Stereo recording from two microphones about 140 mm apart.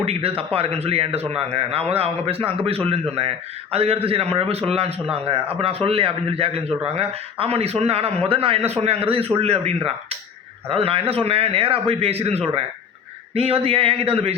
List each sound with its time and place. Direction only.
0.0 s a man's voice: 45° right (ahead or behind)